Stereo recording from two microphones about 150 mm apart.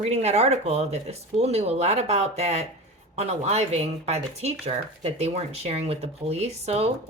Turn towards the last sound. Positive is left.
turn(degrees=-45)  # may be behind; listen again after turning